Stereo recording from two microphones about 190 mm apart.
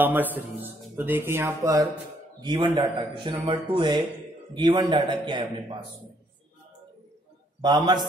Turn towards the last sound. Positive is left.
turn(degrees=-20)  # may be behind; listen again after turning